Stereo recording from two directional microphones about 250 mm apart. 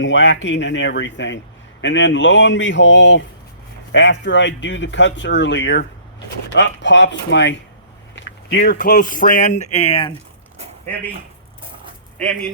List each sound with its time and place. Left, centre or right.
0.0 s speech: left